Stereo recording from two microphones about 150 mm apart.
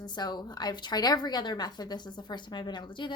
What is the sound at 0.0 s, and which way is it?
A woman's voice, 30° left (ahead or behind).